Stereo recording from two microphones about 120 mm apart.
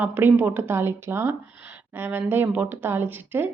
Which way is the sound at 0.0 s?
15° right (ahead or behind).